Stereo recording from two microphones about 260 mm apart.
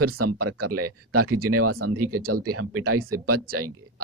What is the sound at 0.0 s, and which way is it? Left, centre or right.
Speech, right.